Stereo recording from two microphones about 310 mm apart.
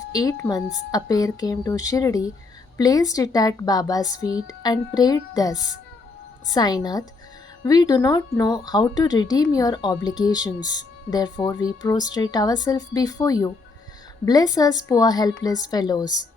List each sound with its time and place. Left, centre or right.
0.1 s speech: centre